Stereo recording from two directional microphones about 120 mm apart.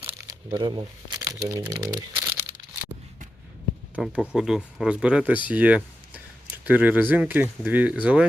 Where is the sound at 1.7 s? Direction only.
35° right (ahead or behind).